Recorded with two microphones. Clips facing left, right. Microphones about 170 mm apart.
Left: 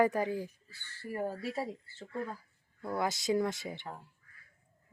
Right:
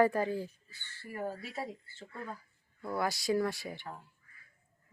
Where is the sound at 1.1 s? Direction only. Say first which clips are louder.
Left 3 dB; 35° left (ahead or behind).